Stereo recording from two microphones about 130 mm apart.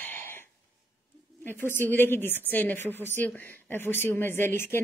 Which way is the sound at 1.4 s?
15° left (ahead or behind).